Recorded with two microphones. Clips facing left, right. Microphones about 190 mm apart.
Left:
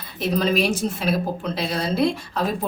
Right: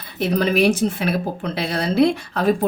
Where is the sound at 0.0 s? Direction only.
60° right (ahead or behind).